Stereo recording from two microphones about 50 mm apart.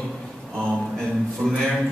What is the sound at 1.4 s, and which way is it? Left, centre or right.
Speech, left.